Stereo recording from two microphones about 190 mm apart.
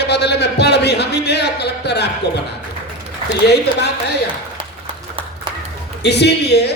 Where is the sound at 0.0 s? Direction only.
60° left (ahead or behind).